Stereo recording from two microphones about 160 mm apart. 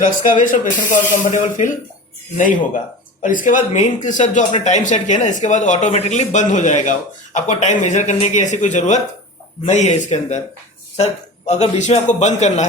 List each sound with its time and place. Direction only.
0.0 s speech: 55° left (ahead or behind)
3.2 s speech: 55° left (ahead or behind)